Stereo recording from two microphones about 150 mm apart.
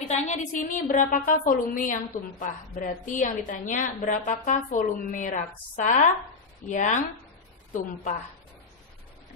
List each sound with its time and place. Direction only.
0.0 s a woman's voice: 50° left (ahead or behind)